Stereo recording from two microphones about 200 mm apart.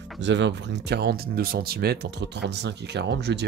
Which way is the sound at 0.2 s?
60° right (ahead or behind).